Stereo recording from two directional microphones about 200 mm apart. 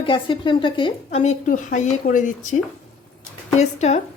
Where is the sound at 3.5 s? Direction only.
35° left (ahead or behind).